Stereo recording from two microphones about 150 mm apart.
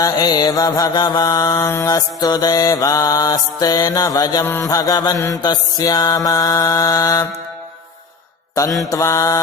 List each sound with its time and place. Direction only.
0.0 s mantra: 25° left (ahead or behind)
8.8 s mantra: 20° left (ahead or behind)